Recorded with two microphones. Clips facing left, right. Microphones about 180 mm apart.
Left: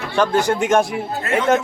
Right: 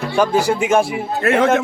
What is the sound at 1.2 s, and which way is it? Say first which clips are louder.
Speech: right 6 dB; 70° right (ahead or behind).